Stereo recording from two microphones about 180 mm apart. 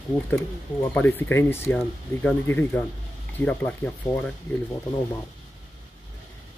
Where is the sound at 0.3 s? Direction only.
10° left (ahead or behind).